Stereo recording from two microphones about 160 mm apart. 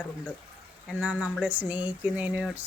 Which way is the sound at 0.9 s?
5° right (ahead or behind).